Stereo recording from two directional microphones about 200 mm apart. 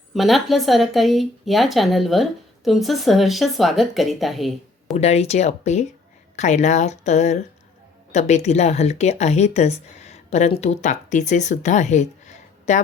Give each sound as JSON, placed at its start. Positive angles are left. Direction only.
{"t": 0.1, "sound": "speech", "side_deg": 0}
{"t": 4.9, "sound": "speech", "side_deg": 30}